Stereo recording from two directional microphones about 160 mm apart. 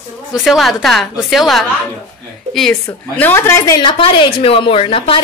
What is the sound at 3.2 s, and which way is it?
Speech, 15° left (ahead or behind).